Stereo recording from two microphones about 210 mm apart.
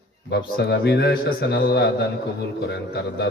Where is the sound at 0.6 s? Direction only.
50° left (ahead or behind).